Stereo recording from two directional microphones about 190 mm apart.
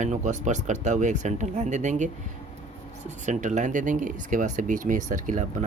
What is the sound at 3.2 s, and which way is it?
Speech, 40° right (ahead or behind).